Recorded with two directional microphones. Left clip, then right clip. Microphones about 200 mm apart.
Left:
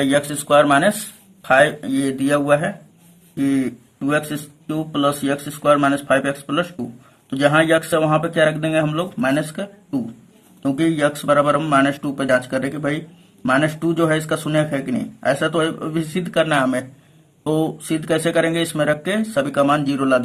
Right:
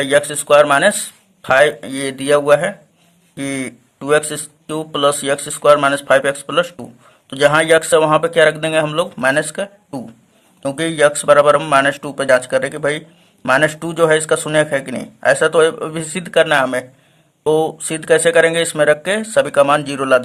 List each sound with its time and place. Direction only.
0.0 s speech: 35° right (ahead or behind)